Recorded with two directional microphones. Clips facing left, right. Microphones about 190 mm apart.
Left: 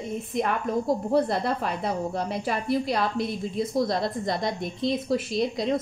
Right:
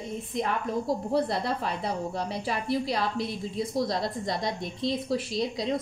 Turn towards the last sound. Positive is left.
turn(degrees=55)  # may be behind; listen again after turning